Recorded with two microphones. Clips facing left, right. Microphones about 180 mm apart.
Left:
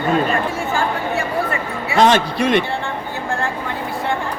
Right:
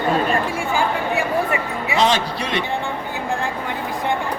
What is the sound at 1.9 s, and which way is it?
Speech, 55° left (ahead or behind).